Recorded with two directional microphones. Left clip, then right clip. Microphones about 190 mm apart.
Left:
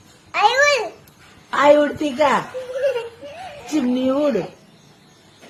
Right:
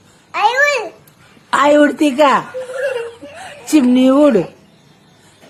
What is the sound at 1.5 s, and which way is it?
A man's voice, 50° right (ahead or behind).